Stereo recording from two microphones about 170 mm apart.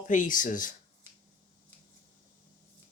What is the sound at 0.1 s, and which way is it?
Speech, 50° left (ahead or behind).